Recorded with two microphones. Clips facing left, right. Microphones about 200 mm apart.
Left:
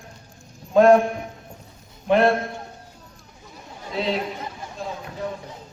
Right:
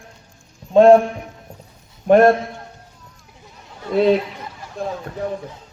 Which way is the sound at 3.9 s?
55° right (ahead or behind).